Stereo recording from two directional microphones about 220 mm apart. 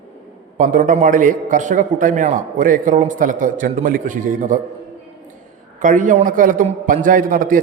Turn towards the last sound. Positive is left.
turn(degrees=-40)  # may be behind; listen again after turning